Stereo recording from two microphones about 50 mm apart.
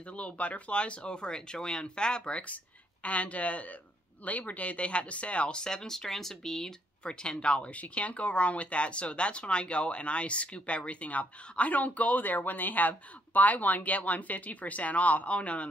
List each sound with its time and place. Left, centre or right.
0.1 s speech: left